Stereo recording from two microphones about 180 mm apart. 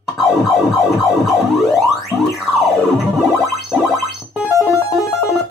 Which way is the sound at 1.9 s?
Centre (ahead or behind).